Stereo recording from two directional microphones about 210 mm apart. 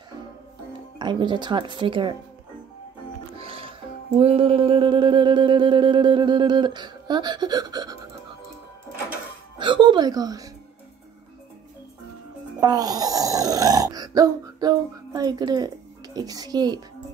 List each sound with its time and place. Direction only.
0.9 s music: 20° right (ahead or behind)
3.3 s music: 25° right (ahead or behind)
9.6 s speech: 20° right (ahead or behind)
12.5 s grunt: 15° right (ahead or behind)